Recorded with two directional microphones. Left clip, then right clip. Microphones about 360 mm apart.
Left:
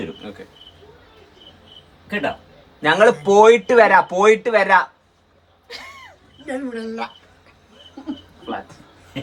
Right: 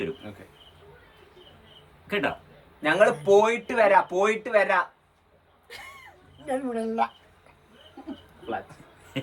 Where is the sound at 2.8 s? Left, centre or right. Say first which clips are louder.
Left 7 dB; left.